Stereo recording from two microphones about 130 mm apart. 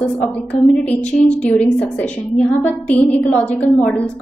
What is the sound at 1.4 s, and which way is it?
A woman's voice, 10° left (ahead or behind).